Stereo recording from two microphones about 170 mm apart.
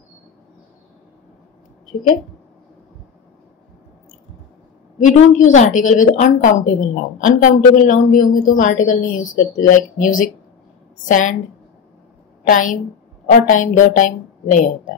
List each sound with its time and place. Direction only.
5.0 s a woman's voice: 45° left (ahead or behind)
12.4 s a woman's voice: 50° left (ahead or behind)